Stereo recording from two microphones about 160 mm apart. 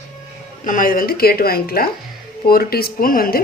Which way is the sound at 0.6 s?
60° left (ahead or behind).